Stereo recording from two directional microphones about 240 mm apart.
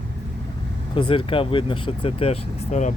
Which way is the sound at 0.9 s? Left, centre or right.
Left.